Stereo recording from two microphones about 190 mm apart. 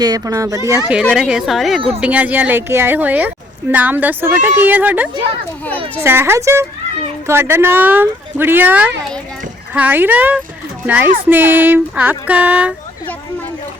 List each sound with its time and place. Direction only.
0.0 s a woman's voice: 20° right (ahead or behind)
1.0 s a woman's voice: 5° right (ahead or behind)